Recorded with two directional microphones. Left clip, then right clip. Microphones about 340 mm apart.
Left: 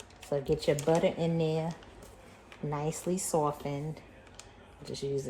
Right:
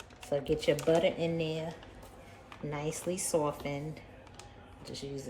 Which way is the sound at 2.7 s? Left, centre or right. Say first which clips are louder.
Left 2 dB; centre.